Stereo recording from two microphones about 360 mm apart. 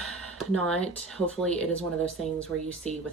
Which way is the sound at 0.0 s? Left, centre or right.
Right.